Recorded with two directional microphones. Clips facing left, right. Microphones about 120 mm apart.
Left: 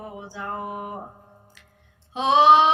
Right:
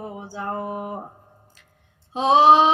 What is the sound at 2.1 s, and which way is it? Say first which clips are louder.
Female singing: right 2 dB; 35° right (ahead or behind).